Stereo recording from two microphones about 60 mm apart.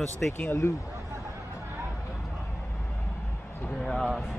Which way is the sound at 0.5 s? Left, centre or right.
Left.